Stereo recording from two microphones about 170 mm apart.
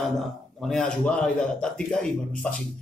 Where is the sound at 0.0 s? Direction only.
Centre (ahead or behind).